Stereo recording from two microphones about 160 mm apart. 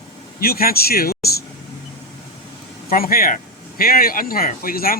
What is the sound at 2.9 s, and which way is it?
Speech, 65° left (ahead or behind).